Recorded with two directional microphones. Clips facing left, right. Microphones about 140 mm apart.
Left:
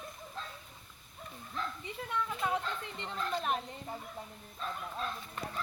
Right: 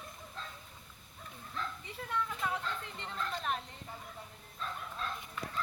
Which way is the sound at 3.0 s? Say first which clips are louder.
Left 6 dB; 5° left (ahead or behind).